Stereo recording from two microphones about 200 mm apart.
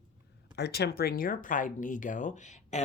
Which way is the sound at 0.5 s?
55° left (ahead or behind).